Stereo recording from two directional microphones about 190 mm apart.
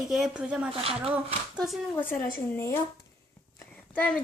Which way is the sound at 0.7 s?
30° right (ahead or behind).